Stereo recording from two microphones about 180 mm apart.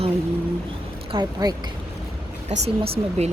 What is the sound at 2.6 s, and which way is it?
Speech, 35° right (ahead or behind).